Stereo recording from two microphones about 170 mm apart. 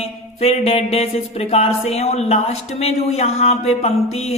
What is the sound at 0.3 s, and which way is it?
Speech, 35° left (ahead or behind).